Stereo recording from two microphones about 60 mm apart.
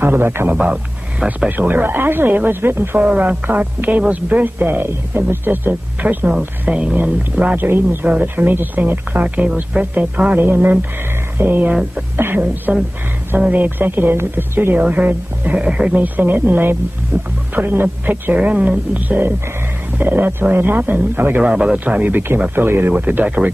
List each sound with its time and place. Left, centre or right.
0.0 s speech: right
0.5 s a man's voice: centre
1.6 s speech: right
3.0 s speech: right
6.7 s a man's voice: centre
7.0 s speech: right
7.6 s speech: right
14.8 s a man's voice: right
15.9 s speech: right
21.4 s a man's voice: centre
21.7 s speech: right